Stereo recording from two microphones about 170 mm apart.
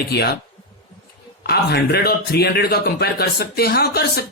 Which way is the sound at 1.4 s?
70° left (ahead or behind).